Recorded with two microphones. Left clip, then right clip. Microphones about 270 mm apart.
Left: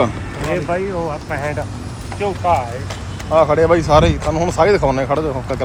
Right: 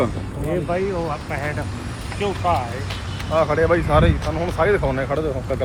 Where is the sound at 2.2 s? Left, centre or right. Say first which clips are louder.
Left 4 dB; left.